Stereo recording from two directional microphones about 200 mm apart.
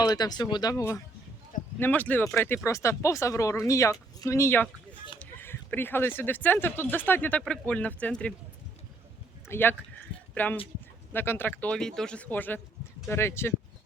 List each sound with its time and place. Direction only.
0.0 s speech: 20° left (ahead or behind)
9.5 s speech: 10° left (ahead or behind)